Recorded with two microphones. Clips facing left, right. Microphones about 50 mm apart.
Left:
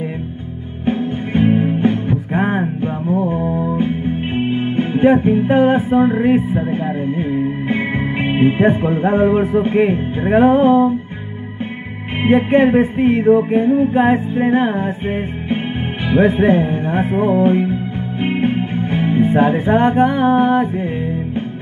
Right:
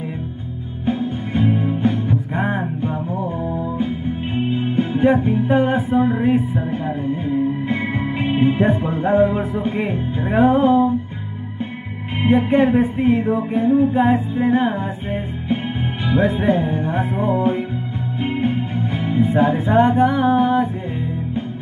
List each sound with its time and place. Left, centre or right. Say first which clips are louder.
0.8 s music: left 3 dB; left
3.7 s music: left 4 dB; left
7.2 s speech: left 1 dB; left
12.2 s music: left 3 dB; left
16.1 s music: left 5 dB; left